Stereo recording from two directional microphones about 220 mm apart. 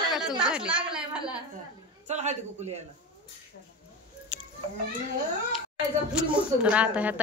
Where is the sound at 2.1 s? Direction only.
30° right (ahead or behind).